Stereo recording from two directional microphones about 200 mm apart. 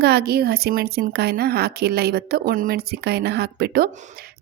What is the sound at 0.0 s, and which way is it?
Speech, 50° right (ahead or behind).